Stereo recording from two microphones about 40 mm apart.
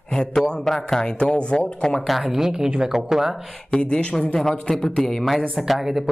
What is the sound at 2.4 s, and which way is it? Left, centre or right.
Speech, centre.